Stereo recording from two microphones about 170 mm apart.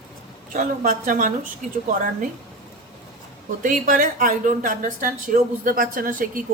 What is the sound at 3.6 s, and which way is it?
Speech, 50° right (ahead or behind).